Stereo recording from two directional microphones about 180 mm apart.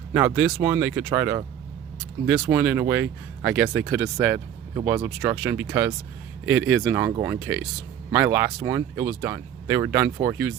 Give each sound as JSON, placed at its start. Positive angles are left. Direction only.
{"t": 0.1, "sound": "speech", "side_deg": -10}